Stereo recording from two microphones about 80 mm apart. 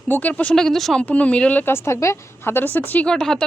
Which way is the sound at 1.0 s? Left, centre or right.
Centre.